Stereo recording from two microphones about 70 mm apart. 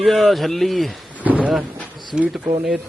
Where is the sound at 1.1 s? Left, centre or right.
Right.